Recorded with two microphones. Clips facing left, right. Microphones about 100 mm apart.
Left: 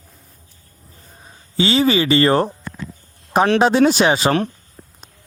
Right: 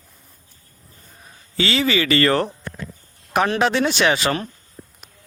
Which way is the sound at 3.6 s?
40° left (ahead or behind).